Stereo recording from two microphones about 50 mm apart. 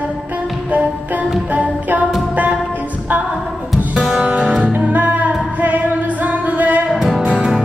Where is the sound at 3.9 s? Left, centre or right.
Right.